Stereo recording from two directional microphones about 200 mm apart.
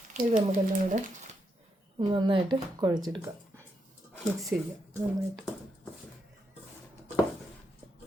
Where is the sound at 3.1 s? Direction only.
15° right (ahead or behind).